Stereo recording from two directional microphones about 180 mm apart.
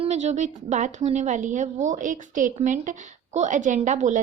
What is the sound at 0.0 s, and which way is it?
A woman's voice, 40° right (ahead or behind).